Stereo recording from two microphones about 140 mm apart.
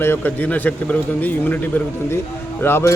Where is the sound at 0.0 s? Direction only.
15° left (ahead or behind).